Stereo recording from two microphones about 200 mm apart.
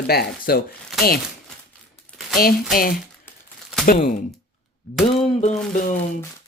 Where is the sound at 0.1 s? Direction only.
50° left (ahead or behind).